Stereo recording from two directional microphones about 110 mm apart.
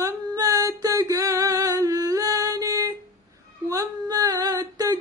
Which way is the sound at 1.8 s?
30° right (ahead or behind).